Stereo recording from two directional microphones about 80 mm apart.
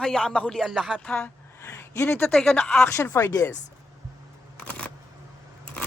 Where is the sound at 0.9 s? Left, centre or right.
Centre.